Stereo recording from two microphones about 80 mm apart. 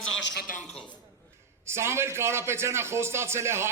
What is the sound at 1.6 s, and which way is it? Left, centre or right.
A man's voice, right.